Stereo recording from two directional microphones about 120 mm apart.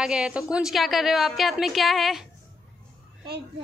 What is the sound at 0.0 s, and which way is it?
A woman's voice, 5° right (ahead or behind).